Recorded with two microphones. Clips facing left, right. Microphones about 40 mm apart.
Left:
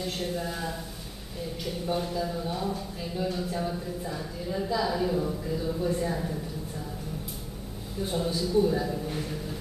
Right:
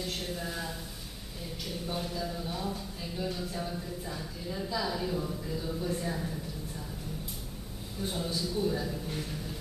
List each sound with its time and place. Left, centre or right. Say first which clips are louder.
0.0 s speech: left 5 dB; centre
8.0 s speech: left 5 dB; centre